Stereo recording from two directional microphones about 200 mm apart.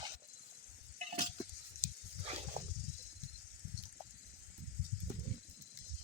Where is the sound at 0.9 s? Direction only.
35° right (ahead or behind).